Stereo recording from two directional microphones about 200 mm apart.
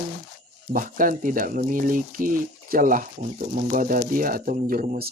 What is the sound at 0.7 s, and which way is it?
Speech, 45° right (ahead or behind).